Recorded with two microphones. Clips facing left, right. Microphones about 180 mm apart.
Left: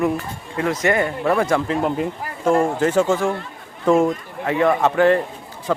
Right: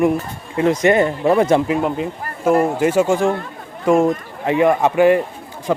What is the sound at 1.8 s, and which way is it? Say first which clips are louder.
Speech: right 1 dB; 5° right (ahead or behind).